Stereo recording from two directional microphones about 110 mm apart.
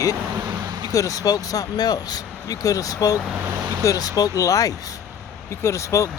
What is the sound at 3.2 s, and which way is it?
Speech, 10° right (ahead or behind).